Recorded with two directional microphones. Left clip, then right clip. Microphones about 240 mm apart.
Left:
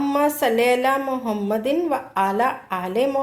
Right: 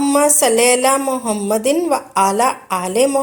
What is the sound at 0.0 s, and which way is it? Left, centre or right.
A woman's voice, right.